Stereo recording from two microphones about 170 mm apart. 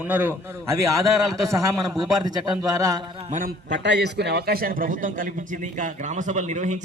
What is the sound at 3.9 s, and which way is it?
A man's voice, 85° right.